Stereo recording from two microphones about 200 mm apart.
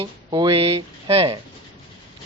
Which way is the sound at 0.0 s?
25° right (ahead or behind).